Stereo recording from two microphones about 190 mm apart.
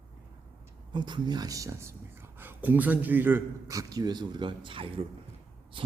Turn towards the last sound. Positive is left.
turn(degrees=-25)  # may be behind; listen again after turning